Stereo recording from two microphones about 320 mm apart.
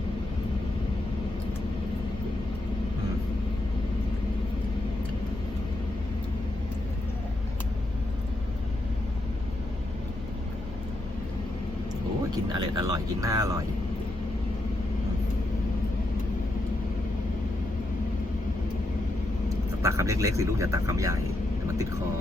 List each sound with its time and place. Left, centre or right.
12.3 s speech: centre
19.5 s speech: centre